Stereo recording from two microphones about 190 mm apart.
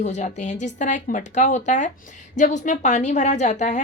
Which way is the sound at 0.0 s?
35° left (ahead or behind).